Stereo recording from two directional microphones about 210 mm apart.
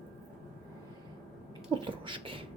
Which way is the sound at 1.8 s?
25° right (ahead or behind).